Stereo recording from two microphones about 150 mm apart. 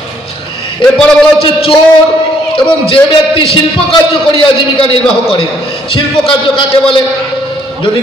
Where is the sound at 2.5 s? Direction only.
35° left (ahead or behind).